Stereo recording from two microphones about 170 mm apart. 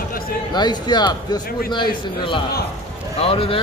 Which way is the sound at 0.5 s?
25° left (ahead or behind).